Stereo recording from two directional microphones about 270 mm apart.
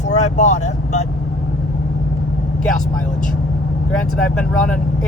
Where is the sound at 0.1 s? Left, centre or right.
Left.